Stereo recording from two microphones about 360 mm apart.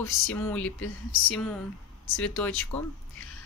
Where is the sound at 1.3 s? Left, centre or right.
Centre.